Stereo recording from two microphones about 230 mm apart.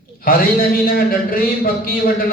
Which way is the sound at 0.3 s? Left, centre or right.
Left.